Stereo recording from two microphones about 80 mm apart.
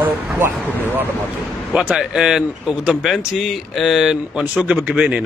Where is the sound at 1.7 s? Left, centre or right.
Centre.